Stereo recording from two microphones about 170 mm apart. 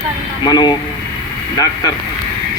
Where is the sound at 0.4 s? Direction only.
25° left (ahead or behind).